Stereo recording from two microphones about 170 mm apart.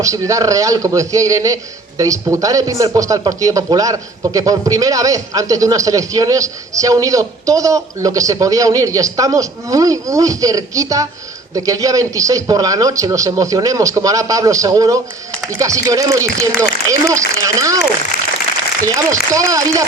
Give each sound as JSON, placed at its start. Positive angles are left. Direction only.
{"t": 0.0, "sound": "a man's voice", "side_deg": -20}
{"t": 18.9, "sound": "a man's voice", "side_deg": -20}